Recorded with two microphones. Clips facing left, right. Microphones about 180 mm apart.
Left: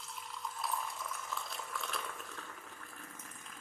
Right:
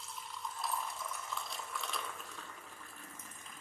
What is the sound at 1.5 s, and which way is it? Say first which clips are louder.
Water: left 1 dB; centre (ahead or behind).